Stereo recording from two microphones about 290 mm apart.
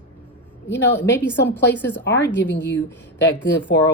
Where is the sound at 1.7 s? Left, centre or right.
Centre.